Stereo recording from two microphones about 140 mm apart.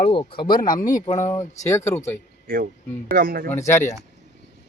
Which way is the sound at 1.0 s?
60° left (ahead or behind).